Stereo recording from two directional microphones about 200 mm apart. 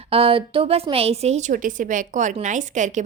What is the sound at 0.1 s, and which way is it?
Speech, 30° right (ahead or behind).